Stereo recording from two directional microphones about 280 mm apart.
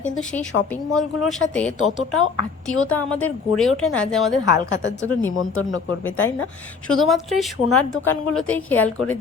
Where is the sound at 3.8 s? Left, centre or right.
Centre.